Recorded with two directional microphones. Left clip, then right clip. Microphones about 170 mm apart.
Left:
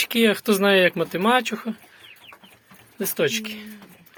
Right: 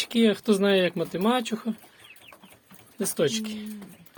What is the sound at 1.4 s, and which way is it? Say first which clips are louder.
Speech: left 3 dB; 15° right (ahead or behind).